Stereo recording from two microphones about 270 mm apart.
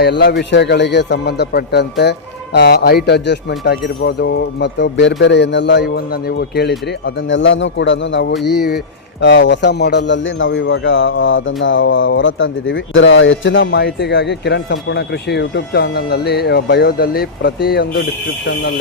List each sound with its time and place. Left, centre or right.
0.0 s speech: left